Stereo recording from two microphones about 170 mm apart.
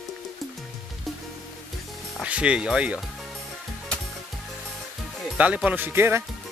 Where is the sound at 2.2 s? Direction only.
5° right (ahead or behind).